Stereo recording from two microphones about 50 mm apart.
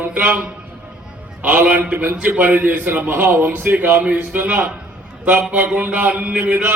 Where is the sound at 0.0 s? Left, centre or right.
Right.